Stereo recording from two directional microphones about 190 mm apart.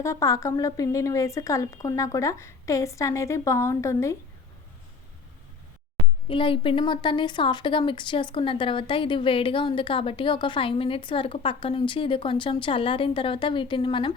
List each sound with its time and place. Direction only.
0.0 s speech: 15° left (ahead or behind)
6.2 s speech: 25° left (ahead or behind)